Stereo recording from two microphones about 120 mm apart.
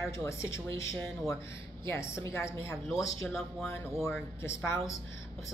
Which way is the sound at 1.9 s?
25° left (ahead or behind).